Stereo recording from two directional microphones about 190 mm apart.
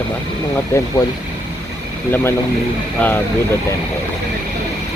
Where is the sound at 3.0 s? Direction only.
10° left (ahead or behind).